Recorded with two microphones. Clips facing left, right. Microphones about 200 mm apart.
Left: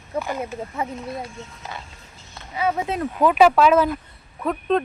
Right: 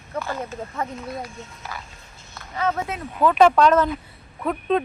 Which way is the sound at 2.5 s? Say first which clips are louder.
Left 2 dB; 10° left (ahead or behind).